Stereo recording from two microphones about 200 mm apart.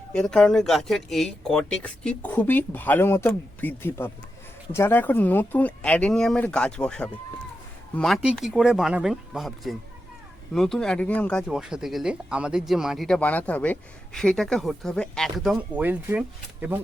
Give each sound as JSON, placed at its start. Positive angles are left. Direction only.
{"t": 0.1, "sound": "speech", "side_deg": 5}